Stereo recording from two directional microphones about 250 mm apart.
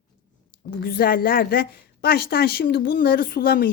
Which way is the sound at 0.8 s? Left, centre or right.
Left.